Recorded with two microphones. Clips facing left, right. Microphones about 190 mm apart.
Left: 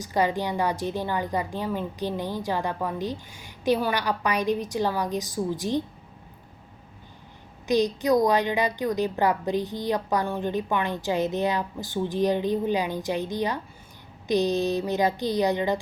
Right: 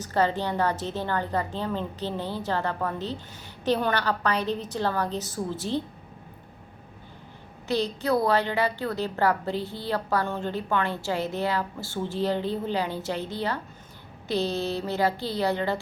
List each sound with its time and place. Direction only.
0.0 s a woman's voice: 10° left (ahead or behind)
7.7 s a woman's voice: 15° left (ahead or behind)